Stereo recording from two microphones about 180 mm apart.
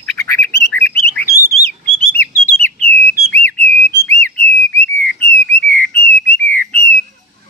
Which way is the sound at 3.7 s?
15° left (ahead or behind).